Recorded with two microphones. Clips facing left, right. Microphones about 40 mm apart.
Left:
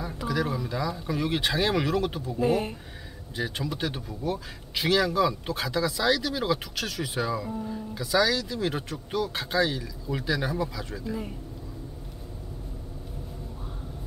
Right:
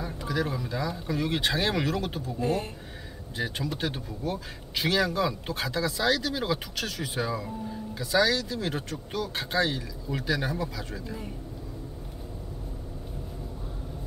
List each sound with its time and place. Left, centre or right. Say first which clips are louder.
0.0 s speech: left 1 dB; centre
2.4 s speech: left 4 dB; centre
3.3 s speech: left 1 dB; centre